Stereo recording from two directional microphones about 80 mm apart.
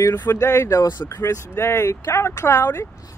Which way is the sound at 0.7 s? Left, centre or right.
Left.